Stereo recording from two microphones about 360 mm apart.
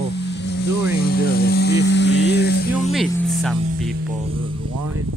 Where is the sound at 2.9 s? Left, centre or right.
Centre.